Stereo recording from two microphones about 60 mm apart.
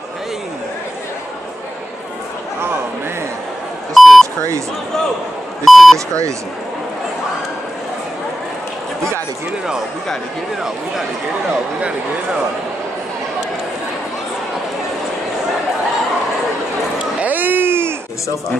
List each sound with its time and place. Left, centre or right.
3.9 s beep: centre
4.4 s speech: right
5.7 s speech: centre
17.2 s a sound: right